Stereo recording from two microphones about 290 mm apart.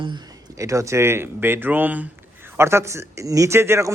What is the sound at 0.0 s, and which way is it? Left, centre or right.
Speech, centre.